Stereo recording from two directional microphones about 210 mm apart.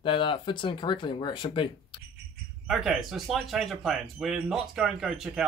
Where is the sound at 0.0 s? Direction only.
25° left (ahead or behind).